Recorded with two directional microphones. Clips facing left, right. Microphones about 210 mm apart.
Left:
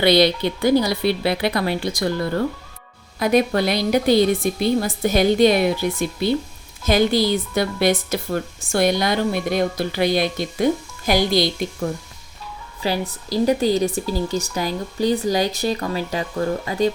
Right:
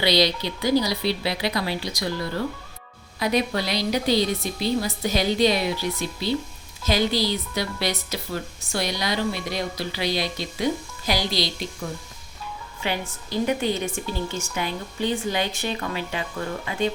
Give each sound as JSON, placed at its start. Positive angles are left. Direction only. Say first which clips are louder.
{"t": 0.0, "sound": "speech", "louder": "left 6 dB", "side_deg": 55}
{"t": 12.8, "sound": "a woman's voice", "louder": "left 5 dB", "side_deg": 35}